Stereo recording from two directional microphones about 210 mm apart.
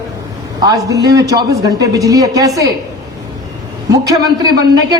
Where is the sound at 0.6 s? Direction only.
15° right (ahead or behind).